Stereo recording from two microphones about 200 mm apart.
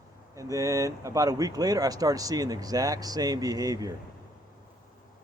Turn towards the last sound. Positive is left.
turn(degrees=-20)  # may be behind; listen again after turning